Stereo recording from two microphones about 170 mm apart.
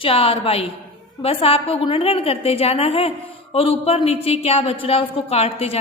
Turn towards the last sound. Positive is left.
turn(degrees=35)  # may be behind; listen again after turning